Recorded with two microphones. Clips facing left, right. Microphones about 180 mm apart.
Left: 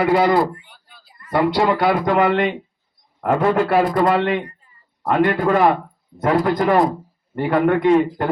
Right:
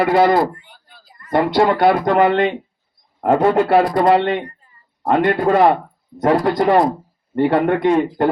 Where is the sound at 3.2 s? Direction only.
40° right (ahead or behind).